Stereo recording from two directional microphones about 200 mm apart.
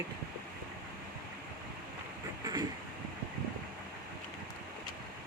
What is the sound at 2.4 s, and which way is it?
Vehicle, 20° right (ahead or behind).